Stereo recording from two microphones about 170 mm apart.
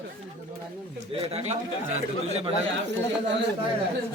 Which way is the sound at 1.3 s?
35° right (ahead or behind).